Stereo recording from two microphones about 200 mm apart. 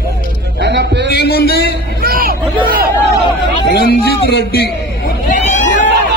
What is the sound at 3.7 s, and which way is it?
A man's voice, 50° left (ahead or behind).